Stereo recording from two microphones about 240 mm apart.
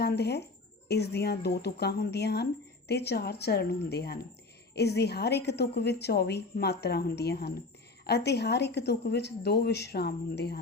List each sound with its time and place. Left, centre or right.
0.0 s speech: left